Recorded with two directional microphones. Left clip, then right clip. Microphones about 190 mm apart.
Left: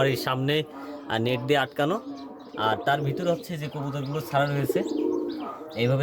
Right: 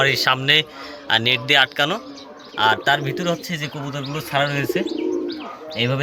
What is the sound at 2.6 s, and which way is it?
A man's voice, 15° left (ahead or behind).